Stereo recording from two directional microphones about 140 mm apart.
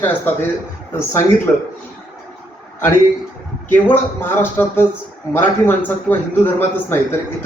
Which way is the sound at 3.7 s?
15° left (ahead or behind).